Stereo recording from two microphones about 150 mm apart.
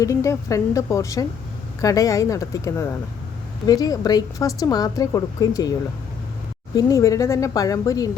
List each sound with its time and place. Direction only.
0.0 s a woman's voice: 20° left (ahead or behind)
6.7 s a woman's voice: 20° left (ahead or behind)